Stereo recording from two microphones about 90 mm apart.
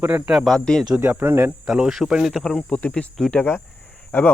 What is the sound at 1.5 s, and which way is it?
Speech, 5° right (ahead or behind).